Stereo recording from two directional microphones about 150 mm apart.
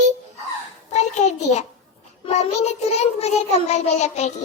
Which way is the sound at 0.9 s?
50° left (ahead or behind).